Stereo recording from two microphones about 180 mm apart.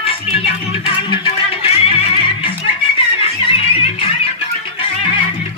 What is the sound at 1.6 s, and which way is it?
Music, 35° left (ahead or behind).